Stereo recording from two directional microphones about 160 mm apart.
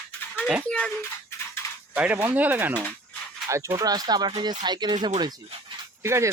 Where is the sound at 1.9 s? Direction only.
10° right (ahead or behind).